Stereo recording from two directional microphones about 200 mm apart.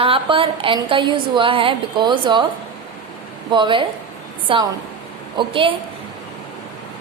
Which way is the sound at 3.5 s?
25° right (ahead or behind).